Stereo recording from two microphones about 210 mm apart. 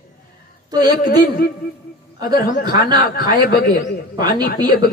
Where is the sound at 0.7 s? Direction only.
20° right (ahead or behind).